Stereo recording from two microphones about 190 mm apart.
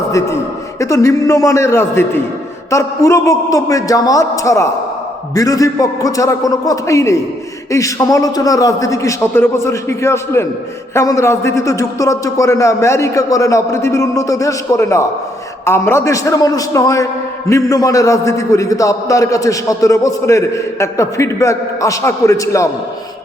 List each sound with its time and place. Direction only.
0.1 s a man's voice: 15° left (ahead or behind)